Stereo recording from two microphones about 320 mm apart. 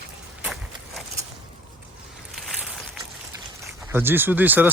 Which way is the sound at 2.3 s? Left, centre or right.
Centre.